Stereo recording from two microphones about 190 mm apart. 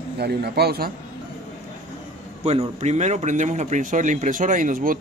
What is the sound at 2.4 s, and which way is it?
A man's voice, 35° right (ahead or behind).